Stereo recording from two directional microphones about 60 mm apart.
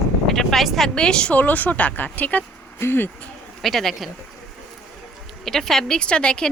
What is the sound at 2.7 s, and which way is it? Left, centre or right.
Speech, left.